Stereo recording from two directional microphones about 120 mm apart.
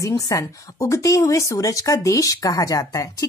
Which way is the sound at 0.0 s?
30° left (ahead or behind).